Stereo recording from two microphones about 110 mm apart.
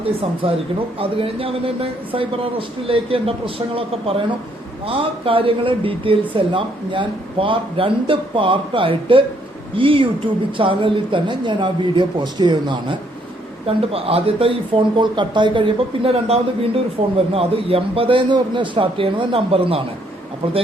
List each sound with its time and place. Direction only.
0.0 s speech: 55° right (ahead or behind)
13.7 s speech: 60° right (ahead or behind)